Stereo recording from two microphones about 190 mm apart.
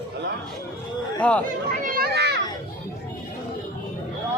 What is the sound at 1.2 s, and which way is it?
Speech, 5° left (ahead or behind).